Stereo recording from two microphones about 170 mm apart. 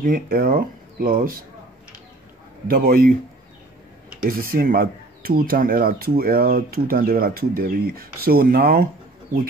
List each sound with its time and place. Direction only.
0.0 s speech: 55° right (ahead or behind)
2.7 s speech: 60° right (ahead or behind)
4.2 s speech: 55° right (ahead or behind)